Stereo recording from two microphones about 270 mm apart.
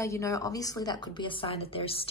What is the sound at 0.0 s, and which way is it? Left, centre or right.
A woman's voice, centre.